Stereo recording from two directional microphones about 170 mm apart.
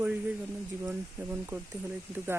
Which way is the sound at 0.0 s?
5° right (ahead or behind).